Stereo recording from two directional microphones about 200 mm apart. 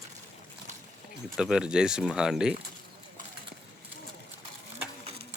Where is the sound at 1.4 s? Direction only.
5° right (ahead or behind).